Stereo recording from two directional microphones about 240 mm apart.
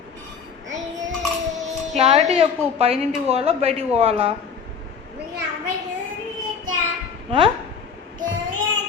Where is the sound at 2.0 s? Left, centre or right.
Right.